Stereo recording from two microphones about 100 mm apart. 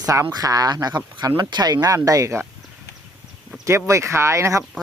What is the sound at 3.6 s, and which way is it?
Speech, 30° right (ahead or behind).